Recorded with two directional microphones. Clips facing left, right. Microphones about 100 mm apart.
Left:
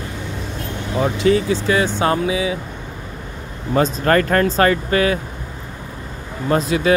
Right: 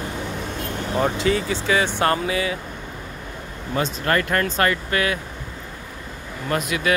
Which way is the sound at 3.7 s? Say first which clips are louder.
Left 6 dB; 35° left (ahead or behind).